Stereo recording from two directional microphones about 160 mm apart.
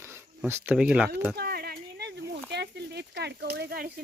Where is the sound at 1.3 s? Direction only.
80° right.